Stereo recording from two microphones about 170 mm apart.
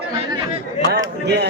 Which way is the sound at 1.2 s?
80° right.